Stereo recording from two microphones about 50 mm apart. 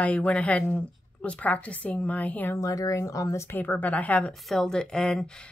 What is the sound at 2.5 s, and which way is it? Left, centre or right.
Speech, left.